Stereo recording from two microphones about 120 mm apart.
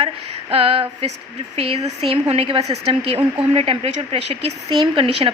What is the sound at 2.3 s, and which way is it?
A woman's voice, 50° right (ahead or behind).